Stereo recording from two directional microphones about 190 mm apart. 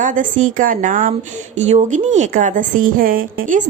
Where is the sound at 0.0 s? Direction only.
40° right (ahead or behind).